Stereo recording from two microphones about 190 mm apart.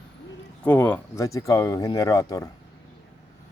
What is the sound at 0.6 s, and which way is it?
Speech, 10° left (ahead or behind).